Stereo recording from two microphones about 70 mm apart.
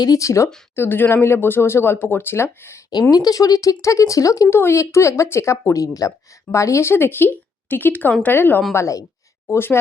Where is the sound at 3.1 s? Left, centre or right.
Left.